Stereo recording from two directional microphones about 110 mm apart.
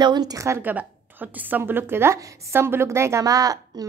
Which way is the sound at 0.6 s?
15° right (ahead or behind).